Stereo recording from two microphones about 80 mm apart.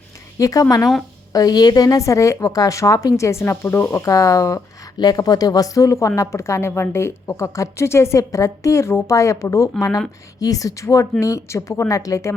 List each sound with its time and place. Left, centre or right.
0.3 s a woman's voice: left